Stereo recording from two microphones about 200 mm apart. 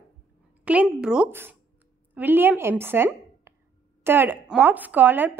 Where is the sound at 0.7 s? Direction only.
5° right (ahead or behind).